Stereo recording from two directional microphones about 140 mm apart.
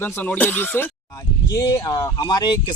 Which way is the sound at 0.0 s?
15° left (ahead or behind).